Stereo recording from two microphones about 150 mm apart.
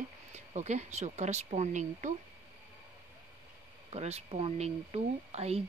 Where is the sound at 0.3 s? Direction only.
50° right (ahead or behind).